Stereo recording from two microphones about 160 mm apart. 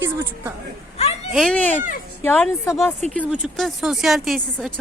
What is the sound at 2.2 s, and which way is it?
Speech, 10° left (ahead or behind).